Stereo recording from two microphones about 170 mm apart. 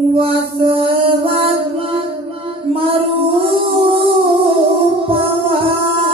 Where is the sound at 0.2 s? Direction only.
30° right (ahead or behind).